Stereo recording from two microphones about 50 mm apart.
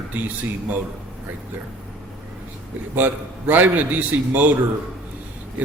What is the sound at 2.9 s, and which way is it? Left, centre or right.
Speech, right.